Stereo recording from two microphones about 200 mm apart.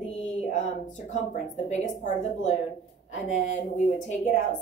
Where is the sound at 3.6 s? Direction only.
35° left (ahead or behind).